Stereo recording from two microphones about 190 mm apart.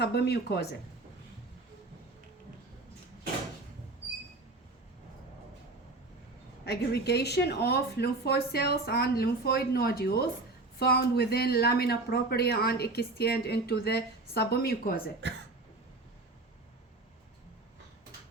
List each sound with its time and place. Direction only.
0.0 s speech: 60° left (ahead or behind)
6.7 s speech: 60° left (ahead or behind)
15.2 s speech: 70° right (ahead or behind)